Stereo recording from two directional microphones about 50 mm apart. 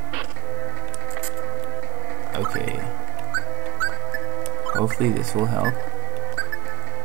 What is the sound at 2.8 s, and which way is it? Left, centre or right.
Music, centre.